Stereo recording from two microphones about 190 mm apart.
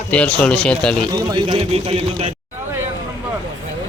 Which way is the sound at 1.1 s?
20° right (ahead or behind).